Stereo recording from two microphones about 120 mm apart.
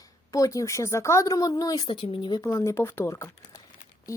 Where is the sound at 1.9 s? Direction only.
40° left (ahead or behind).